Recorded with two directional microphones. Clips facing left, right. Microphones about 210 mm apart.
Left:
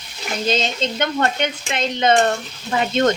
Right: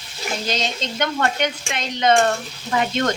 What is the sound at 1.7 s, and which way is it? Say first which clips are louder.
Speech: left 2 dB; 25° left (ahead or behind).